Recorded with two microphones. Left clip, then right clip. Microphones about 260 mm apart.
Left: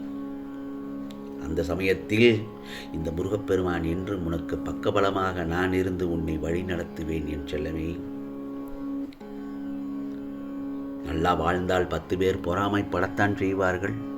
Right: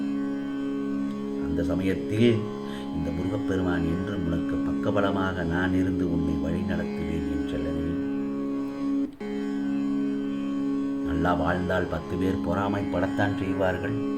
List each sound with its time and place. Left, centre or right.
1.9 s speech: left
4.9 s speech: left
11.2 s speech: left